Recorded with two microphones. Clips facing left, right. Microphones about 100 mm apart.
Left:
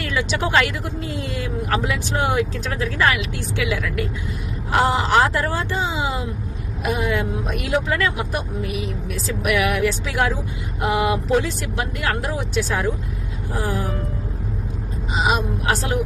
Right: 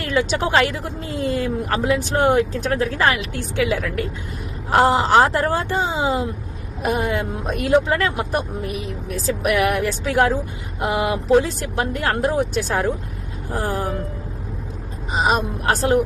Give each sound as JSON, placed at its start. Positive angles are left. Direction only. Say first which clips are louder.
{"t": 0.0, "sound": "speech", "louder": "right 3 dB", "side_deg": -40}
{"t": 2.0, "sound": "speech", "louder": "right 4 dB", "side_deg": -45}
{"t": 10.8, "sound": "speech", "louder": "left 1 dB", "side_deg": -30}
{"t": 15.1, "sound": "speech", "louder": "right 1 dB", "side_deg": -40}